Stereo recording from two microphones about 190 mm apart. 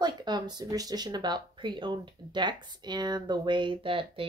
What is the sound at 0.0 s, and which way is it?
Speech, 20° right (ahead or behind).